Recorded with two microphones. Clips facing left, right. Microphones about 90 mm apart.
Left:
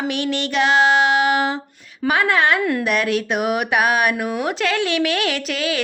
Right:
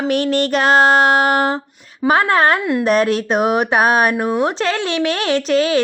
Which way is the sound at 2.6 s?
20° right (ahead or behind).